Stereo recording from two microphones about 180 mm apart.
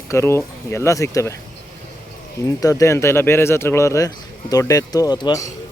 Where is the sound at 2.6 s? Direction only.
15° left (ahead or behind).